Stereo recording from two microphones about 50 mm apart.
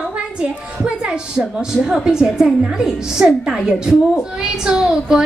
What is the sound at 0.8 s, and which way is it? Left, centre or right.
A woman's voice, centre.